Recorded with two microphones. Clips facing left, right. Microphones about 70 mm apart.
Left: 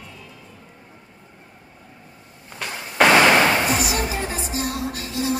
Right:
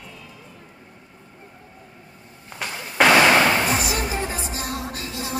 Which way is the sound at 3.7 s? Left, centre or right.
Right.